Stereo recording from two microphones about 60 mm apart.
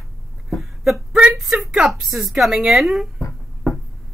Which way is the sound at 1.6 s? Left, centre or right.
Centre.